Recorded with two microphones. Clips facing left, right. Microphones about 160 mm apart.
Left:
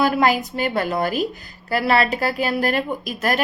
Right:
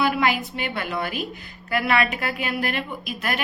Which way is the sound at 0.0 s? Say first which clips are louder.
Left 4 dB; 40° left (ahead or behind).